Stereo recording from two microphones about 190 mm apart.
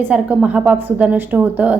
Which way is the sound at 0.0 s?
5° right (ahead or behind).